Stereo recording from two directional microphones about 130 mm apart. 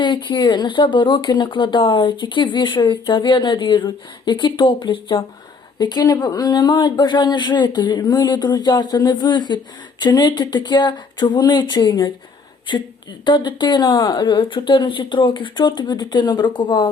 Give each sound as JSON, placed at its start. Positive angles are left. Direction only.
{"t": 0.0, "sound": "speech", "side_deg": 35}